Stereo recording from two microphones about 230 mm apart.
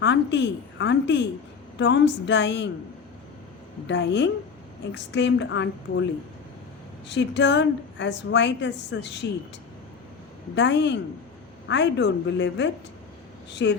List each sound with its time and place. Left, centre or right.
0.0 s a woman's voice: left
3.8 s a woman's voice: left
7.1 s a woman's voice: left
10.5 s a woman's voice: left